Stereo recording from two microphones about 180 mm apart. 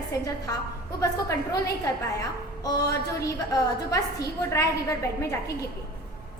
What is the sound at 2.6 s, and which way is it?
A woman's voice, 20° left (ahead or behind).